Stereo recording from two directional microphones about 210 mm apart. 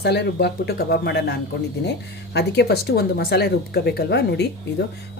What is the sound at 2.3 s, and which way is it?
Speech, 55° left (ahead or behind).